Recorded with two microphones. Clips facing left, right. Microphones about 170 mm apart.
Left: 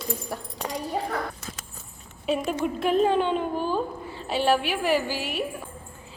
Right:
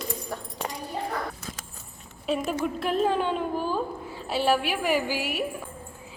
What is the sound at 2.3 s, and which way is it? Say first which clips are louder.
A woman's voice: left 1 dB; 5° right (ahead or behind).